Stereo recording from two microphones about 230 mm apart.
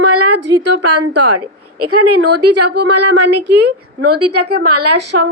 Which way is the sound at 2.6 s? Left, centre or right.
Right.